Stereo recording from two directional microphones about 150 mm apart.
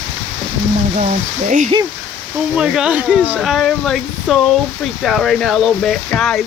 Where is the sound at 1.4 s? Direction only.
55° right (ahead or behind).